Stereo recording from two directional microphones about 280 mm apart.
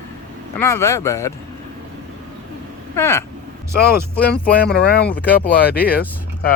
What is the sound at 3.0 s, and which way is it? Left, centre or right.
Speech, centre.